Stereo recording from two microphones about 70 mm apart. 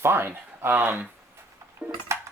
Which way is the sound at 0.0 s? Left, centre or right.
Right.